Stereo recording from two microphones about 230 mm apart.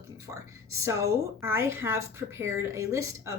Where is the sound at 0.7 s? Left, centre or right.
Centre.